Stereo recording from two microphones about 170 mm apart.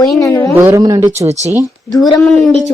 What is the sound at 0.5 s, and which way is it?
Speech, 15° right (ahead or behind).